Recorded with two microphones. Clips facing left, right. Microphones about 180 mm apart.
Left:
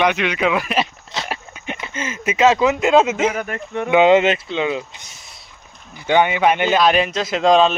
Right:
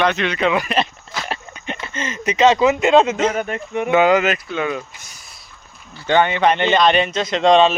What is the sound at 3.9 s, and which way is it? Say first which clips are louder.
Speech: left 2 dB; 25° left (ahead or behind).